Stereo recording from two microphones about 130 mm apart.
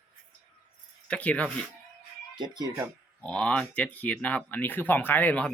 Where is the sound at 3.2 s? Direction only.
10° left (ahead or behind).